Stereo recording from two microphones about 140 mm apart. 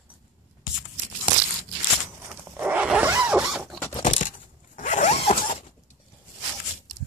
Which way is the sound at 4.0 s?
60° left (ahead or behind).